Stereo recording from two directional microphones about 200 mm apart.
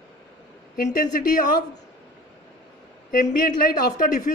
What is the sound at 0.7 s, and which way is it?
Speech, 40° left (ahead or behind).